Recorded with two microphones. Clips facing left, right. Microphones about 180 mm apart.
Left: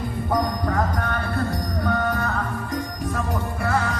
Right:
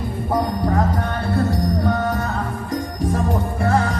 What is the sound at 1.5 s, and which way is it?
Music, 25° right (ahead or behind).